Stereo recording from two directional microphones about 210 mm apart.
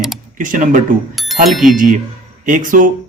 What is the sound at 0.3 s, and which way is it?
Speech, 40° right (ahead or behind).